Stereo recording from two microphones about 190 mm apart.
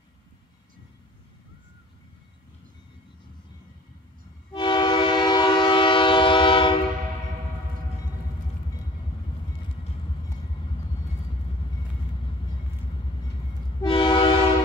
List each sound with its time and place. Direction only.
4.5 s train: 25° left (ahead or behind)
13.7 s train: 25° left (ahead or behind)